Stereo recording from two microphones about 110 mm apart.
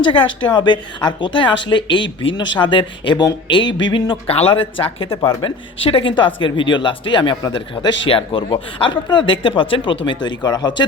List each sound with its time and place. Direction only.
0.0 s a woman's voice: 50° left (ahead or behind)